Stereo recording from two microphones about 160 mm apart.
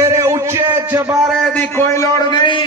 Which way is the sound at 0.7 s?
15° right (ahead or behind).